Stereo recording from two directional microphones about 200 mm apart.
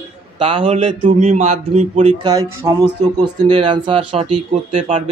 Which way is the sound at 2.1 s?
20° right (ahead or behind).